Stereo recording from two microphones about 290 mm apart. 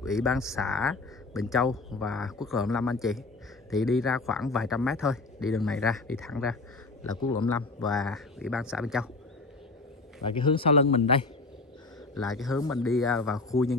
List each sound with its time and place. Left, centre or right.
0.0 s speech: centre
7.8 s speech: centre
10.2 s a man's voice: centre
12.1 s speech: centre